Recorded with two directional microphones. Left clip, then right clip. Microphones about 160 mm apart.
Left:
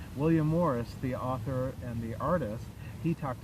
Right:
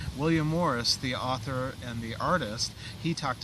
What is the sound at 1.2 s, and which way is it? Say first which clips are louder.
Speech: right 3 dB; 35° right (ahead or behind).